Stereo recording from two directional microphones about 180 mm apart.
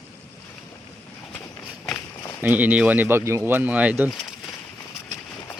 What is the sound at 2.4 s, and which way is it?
Speech, 10° right (ahead or behind).